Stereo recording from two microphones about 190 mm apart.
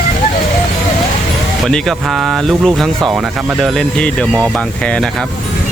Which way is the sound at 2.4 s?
Centre (ahead or behind).